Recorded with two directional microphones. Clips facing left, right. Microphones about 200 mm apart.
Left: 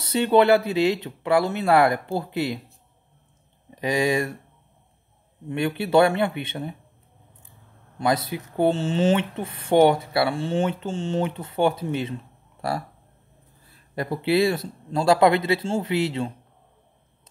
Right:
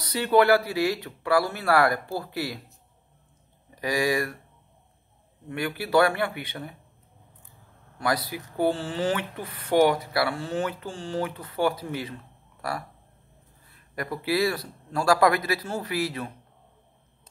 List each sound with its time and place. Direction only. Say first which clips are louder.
0.0 s speech: left 3 dB; 25° left (ahead or behind)
3.7 s speech: left 3 dB; 20° left (ahead or behind)
5.5 s speech: left 4 dB; 25° left (ahead or behind)
8.0 s speech: left 4 dB; 25° left (ahead or behind)
13.9 s speech: left 5 dB; 25° left (ahead or behind)